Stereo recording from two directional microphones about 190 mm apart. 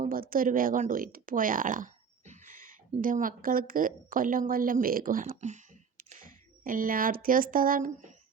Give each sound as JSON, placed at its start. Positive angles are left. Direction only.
{"t": 0.0, "sound": "speech", "side_deg": -50}